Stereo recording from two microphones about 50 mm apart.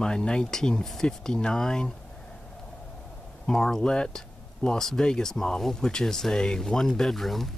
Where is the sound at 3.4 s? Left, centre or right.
Centre.